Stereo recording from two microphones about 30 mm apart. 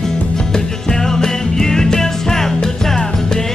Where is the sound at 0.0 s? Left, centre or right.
Centre.